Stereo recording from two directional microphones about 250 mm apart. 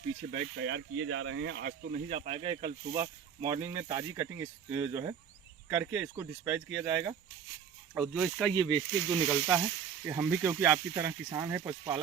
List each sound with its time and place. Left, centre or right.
0.3 s speech: right
2.0 s speech: right